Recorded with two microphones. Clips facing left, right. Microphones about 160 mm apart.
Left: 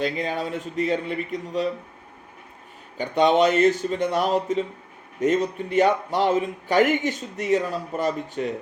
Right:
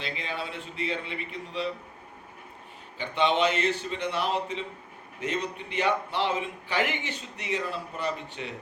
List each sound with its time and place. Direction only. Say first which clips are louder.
0.0 s speech: left 9 dB; 45° left (ahead or behind)
3.0 s speech: left 6 dB; 45° left (ahead or behind)